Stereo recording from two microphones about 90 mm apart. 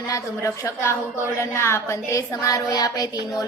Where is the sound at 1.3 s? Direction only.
30° left (ahead or behind); by 3.0 s 45° left (ahead or behind).